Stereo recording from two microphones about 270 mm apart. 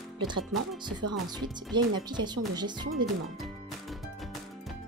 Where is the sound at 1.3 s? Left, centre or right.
Centre.